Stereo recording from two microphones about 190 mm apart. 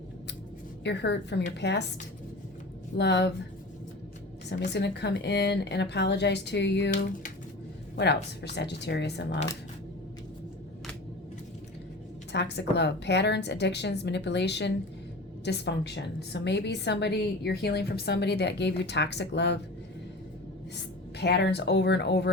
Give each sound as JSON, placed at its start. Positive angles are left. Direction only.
{"t": 0.9, "sound": "a woman's voice", "side_deg": 65}
{"t": 3.0, "sound": "a woman's voice", "side_deg": 65}
{"t": 4.4, "sound": "a woman's voice", "side_deg": 60}
{"t": 7.9, "sound": "a woman's voice", "side_deg": 65}
{"t": 12.3, "sound": "a woman's voice", "side_deg": 65}
{"t": 21.2, "sound": "a woman's voice", "side_deg": 60}